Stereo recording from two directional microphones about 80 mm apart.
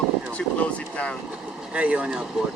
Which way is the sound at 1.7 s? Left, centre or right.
Centre.